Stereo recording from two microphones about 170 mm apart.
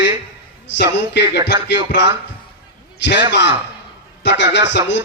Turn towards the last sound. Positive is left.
turn(degrees=90)